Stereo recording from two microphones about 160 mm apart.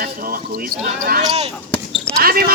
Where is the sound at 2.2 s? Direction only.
70° right (ahead or behind).